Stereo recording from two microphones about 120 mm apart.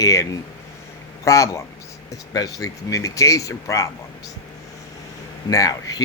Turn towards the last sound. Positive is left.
turn(degrees=30)  # may be behind; listen again after turning